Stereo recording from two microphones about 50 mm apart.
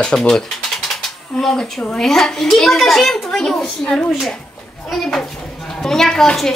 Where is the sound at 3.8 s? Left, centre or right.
Centre.